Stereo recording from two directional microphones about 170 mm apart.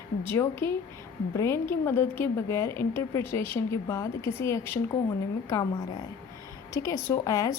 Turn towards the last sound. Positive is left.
turn(degrees=20)  # may be behind; listen again after turning